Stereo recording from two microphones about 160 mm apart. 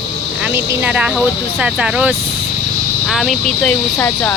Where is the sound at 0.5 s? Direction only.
10° right (ahead or behind); by 4.4 s 15° left (ahead or behind).